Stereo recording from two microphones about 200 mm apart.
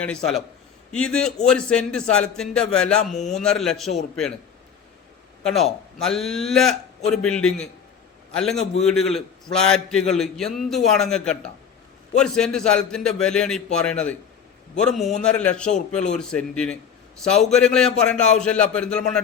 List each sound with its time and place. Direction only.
0.0 s a man's voice: 5° left (ahead or behind)
5.4 s a man's voice: centre (ahead or behind)
8.8 s a man's voice: centre (ahead or behind)